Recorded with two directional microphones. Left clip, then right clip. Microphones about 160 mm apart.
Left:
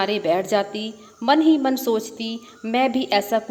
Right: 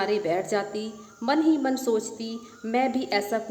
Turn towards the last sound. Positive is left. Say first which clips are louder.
# left 6 dB
turn(degrees=20)  # may be behind; listen again after turning